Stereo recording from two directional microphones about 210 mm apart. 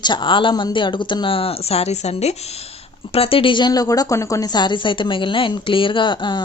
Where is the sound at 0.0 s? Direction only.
20° left (ahead or behind).